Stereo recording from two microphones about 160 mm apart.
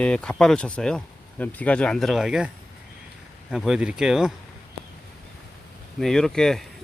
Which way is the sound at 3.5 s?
Centre (ahead or behind).